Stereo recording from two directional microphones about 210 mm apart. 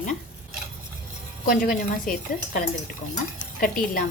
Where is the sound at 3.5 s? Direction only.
45° left (ahead or behind).